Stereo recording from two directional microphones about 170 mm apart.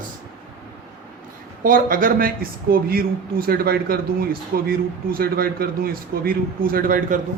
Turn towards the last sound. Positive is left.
turn(degrees=-55)  # may be behind; listen again after turning